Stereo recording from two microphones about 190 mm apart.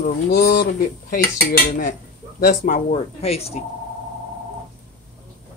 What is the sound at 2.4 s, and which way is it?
Speech, 40° left (ahead or behind).